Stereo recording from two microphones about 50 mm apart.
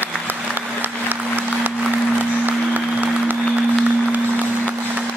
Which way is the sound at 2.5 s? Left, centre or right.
Right.